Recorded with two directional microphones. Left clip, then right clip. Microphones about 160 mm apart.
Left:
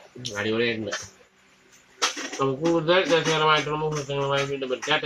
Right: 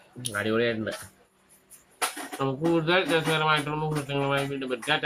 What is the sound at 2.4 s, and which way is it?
Speech, 35° right (ahead or behind).